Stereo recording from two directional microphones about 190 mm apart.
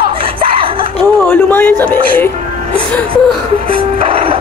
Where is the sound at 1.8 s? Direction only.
10° left (ahead or behind).